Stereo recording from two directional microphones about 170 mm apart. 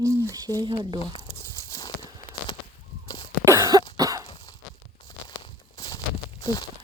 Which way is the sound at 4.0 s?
20° right (ahead or behind).